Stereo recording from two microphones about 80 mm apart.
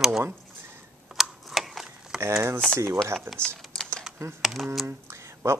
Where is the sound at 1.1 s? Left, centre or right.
Centre.